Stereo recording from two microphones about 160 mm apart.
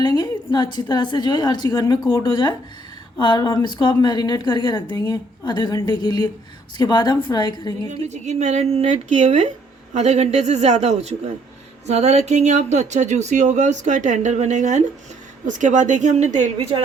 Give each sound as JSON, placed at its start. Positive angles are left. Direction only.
{"t": 0.2, "sound": "a woman's voice", "side_deg": 25}
{"t": 8.0, "sound": "speech", "side_deg": -45}